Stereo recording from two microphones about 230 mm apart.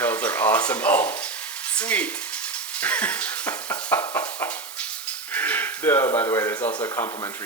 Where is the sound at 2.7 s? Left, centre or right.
Centre.